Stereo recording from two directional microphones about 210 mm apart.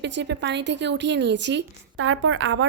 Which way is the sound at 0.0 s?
55° right (ahead or behind).